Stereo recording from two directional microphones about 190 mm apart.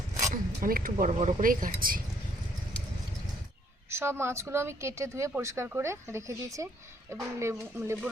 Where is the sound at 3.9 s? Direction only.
15° right (ahead or behind).